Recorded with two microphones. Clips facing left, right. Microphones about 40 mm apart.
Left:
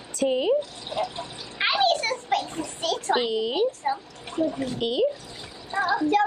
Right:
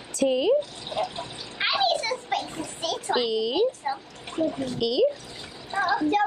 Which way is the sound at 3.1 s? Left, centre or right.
Left.